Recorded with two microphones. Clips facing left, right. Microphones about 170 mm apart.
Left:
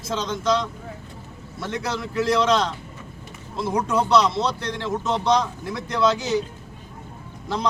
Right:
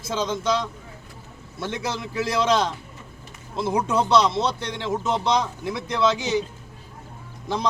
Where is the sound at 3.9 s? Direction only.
25° right (ahead or behind).